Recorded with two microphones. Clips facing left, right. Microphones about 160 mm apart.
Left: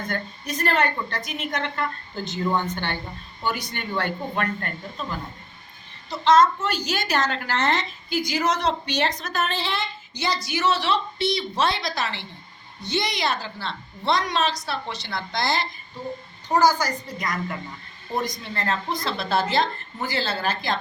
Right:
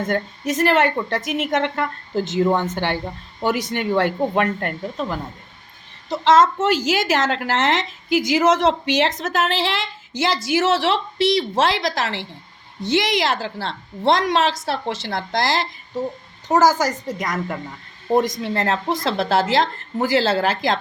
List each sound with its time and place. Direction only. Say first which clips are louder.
0.1 s a woman's voice: right 8 dB; 90° right
1.5 s a woman's voice: right 4 dB; 80° right
6.1 s a woman's voice: right 2 dB; 90° right
18.2 s a woman's voice: right 8 dB; 90° right